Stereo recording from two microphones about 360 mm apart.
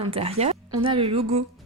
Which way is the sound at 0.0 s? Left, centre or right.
Centre.